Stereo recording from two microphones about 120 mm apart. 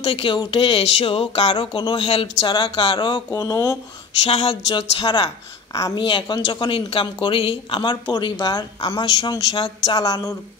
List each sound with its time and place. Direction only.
0.0 s speech: 50° left (ahead or behind)
2.0 s speech: 55° left (ahead or behind)
2.4 s speech: 40° left (ahead or behind)
4.2 s speech: 55° left (ahead or behind)
4.6 s speech: 40° left (ahead or behind)